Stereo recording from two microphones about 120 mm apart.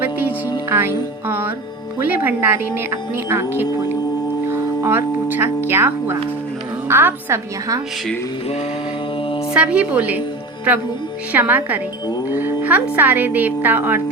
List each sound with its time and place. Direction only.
0.0 s music: 15° right (ahead or behind)
0.7 s speech: 20° right (ahead or behind)
4.4 s a woman's voice: 20° right (ahead or behind)
9.6 s speech: 10° right (ahead or behind)
11.3 s a woman's voice: 15° right (ahead or behind)